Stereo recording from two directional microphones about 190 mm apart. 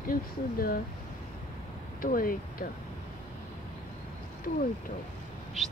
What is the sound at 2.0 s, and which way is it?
Speech, 50° left (ahead or behind).